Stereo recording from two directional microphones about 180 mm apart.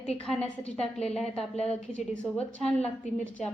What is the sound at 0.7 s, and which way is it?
Speech, 35° left (ahead or behind).